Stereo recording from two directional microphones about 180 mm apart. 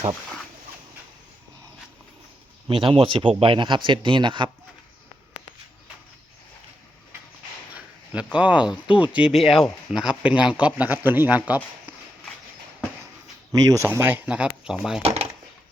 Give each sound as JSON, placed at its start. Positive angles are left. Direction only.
{"t": 2.6, "sound": "speech", "side_deg": -30}
{"t": 8.1, "sound": "speech", "side_deg": -5}
{"t": 13.5, "sound": "speech", "side_deg": -20}
{"t": 15.0, "sound": "a sound", "side_deg": -35}